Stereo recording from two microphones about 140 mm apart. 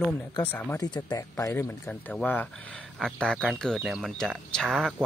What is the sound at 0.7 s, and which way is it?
Speech, 30° left (ahead or behind).